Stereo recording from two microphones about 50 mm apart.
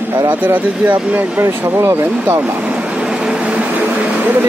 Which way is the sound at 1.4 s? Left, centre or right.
Right.